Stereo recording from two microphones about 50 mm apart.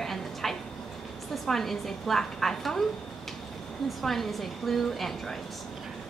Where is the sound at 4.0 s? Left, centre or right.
Centre.